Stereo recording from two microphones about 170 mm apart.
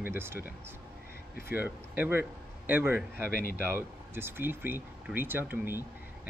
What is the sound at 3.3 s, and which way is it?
Speech, 60° left (ahead or behind).